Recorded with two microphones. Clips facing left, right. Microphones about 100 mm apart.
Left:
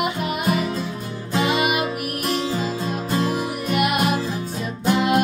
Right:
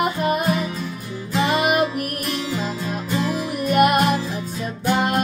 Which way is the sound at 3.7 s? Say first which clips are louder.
Right 6 dB; 45° right (ahead or behind).